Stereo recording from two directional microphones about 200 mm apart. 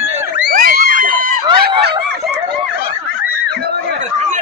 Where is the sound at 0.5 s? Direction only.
45° right (ahead or behind).